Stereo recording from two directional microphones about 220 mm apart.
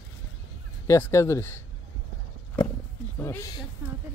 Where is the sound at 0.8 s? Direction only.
10° left (ahead or behind).